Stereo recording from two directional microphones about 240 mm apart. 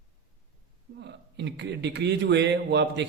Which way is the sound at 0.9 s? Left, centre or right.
Right.